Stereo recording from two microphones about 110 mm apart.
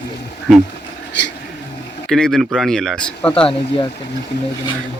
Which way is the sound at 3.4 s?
55° left (ahead or behind).